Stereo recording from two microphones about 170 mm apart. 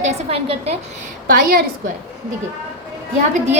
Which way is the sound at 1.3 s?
55° right (ahead or behind).